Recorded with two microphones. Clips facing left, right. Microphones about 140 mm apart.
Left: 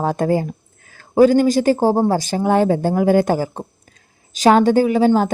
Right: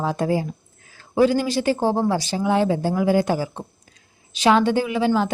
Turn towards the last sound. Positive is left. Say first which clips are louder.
# left 6 dB
turn(degrees=45)  # may be behind; listen again after turning